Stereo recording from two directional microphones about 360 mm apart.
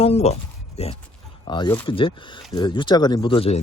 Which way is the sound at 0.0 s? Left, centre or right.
Centre.